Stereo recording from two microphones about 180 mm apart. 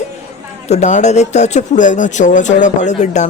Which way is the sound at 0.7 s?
40° left (ahead or behind).